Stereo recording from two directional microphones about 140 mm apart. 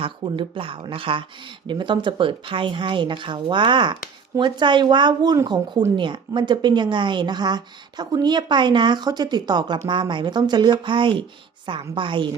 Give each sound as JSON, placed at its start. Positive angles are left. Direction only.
{"t": 0.0, "sound": "a woman's voice", "side_deg": -40}